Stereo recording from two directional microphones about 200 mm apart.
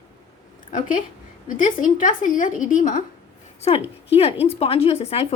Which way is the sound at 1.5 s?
40° left (ahead or behind).